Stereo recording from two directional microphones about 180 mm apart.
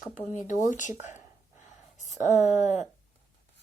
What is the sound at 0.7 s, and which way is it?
Speech, 45° left (ahead or behind).